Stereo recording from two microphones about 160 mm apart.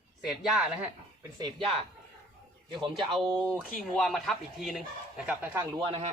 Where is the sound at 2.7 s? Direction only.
30° right (ahead or behind).